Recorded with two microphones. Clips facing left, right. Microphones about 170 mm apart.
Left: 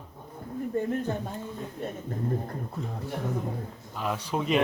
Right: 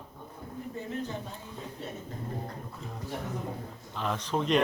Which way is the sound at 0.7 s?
55° left (ahead or behind).